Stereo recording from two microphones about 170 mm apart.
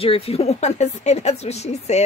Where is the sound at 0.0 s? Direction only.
35° left (ahead or behind).